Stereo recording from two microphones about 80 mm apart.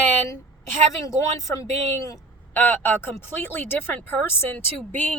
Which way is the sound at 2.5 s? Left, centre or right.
Left.